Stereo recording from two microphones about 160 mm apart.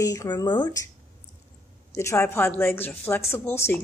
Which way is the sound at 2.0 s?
15° left (ahead or behind).